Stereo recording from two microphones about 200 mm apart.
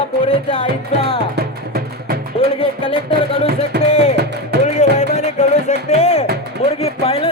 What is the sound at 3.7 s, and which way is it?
Music, 55° right (ahead or behind).